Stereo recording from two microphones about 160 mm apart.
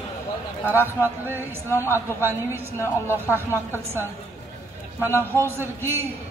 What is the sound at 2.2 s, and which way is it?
Speech, 15° right (ahead or behind).